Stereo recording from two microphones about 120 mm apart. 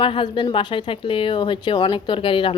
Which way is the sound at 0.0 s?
45° left (ahead or behind).